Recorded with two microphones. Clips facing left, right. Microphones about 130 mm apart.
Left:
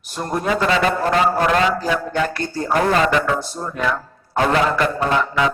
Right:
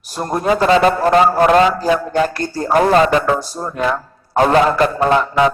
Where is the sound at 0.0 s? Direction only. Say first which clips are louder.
Right 4 dB; 40° right (ahead or behind).